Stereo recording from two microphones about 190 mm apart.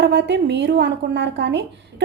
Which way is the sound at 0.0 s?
65° right (ahead or behind).